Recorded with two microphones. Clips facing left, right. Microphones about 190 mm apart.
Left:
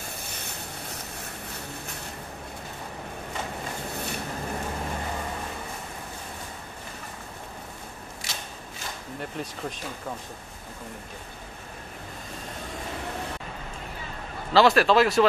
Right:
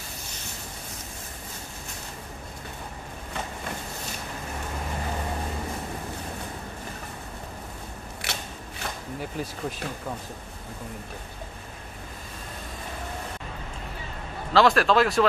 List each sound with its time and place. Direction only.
8.2 s scissors: 65° right (ahead or behind)
9.2 s speech: 5° right (ahead or behind)
14.5 s speech: centre (ahead or behind)